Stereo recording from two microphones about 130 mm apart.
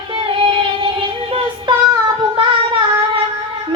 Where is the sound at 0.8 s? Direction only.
40° right (ahead or behind).